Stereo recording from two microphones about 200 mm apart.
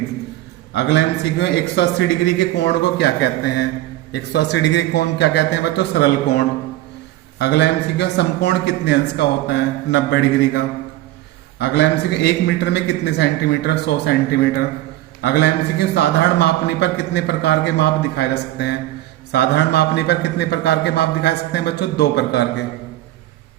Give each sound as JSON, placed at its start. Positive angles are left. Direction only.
{"t": 0.7, "sound": "a man's voice", "side_deg": 60}
{"t": 11.6, "sound": "a man's voice", "side_deg": 60}
{"t": 15.2, "sound": "a man's voice", "side_deg": 55}